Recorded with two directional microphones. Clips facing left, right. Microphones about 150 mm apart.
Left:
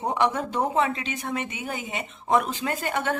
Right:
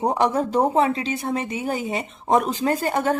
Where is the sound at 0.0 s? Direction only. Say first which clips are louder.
Right 4 dB; 35° right (ahead or behind).